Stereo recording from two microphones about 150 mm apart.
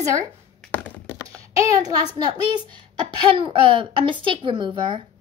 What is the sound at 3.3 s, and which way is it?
Speech, 35° right (ahead or behind).